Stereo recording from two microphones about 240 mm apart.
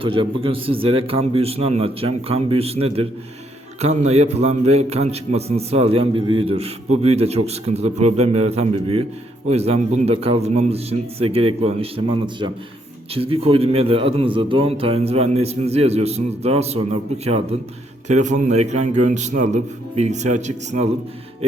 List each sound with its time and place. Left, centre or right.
0.0 s a man's voice: right